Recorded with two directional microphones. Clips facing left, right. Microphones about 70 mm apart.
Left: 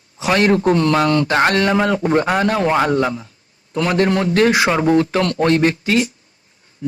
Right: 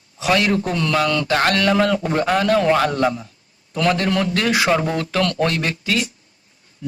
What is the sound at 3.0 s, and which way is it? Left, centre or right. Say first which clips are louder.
Speech: even; centre.